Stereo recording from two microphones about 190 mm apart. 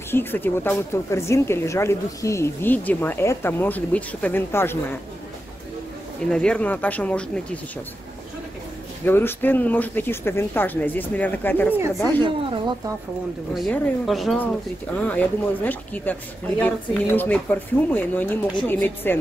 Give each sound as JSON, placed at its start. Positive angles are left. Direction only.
{"t": 0.1, "sound": "speech", "side_deg": 10}
{"t": 6.3, "sound": "speech", "side_deg": 5}
{"t": 9.0, "sound": "speech", "side_deg": 10}
{"t": 12.4, "sound": "speech", "side_deg": -25}
{"t": 13.6, "sound": "speech", "side_deg": 0}